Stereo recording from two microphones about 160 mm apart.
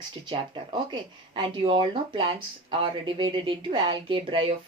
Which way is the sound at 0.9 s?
30° right (ahead or behind).